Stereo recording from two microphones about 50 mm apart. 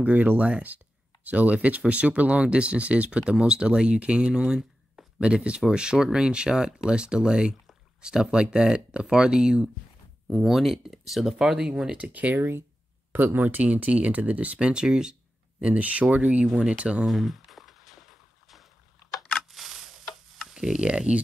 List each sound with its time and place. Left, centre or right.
0.0 s speech: right; by 9.7 s centre
10.3 s speech: centre
12.1 s speech: right
12.4 s speech: right
17.0 s music: centre
19.5 s a sound: centre
20.8 s speech: right